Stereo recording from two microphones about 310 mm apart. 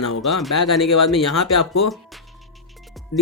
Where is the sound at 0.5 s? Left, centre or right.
Left.